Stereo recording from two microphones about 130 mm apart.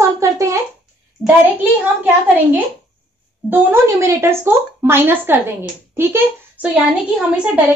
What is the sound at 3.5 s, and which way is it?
Speech, 20° right (ahead or behind).